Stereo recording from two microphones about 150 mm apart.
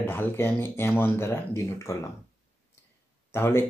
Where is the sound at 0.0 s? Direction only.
15° left (ahead or behind).